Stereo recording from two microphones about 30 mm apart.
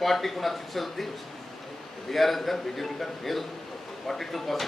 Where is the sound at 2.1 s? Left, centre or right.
Centre.